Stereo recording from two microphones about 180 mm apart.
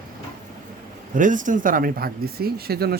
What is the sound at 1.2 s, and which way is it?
Speech, 45° right (ahead or behind).